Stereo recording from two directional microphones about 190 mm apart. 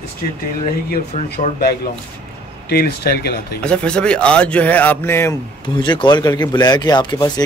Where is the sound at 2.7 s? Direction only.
55° left (ahead or behind).